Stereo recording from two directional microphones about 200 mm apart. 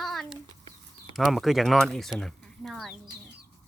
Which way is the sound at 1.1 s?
Centre (ahead or behind).